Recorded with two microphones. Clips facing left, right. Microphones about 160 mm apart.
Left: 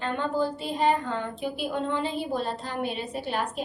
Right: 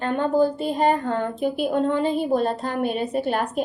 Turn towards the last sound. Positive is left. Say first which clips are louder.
# right 7 dB
turn(degrees=-50)  # may be behind; listen again after turning